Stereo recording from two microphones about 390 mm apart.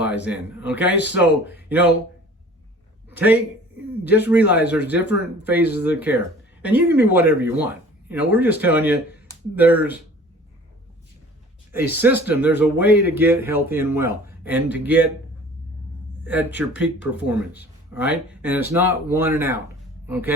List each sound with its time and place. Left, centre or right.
0.3 s speech: centre
3.1 s a man's voice: centre
5.0 s speech: left
5.5 s speech: centre
11.7 s speech: centre
16.2 s speech: centre